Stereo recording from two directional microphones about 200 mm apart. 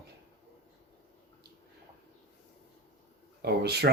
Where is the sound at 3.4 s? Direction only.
55° right (ahead or behind).